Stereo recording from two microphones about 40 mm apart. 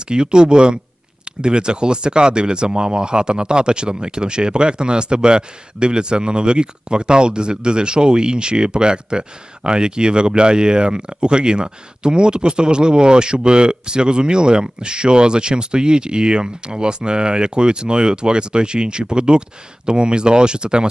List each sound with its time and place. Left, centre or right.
0.1 s speech: right